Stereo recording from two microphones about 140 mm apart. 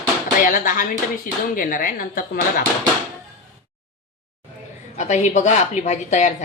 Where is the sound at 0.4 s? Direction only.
75° left (ahead or behind); by 2.6 s 90° left.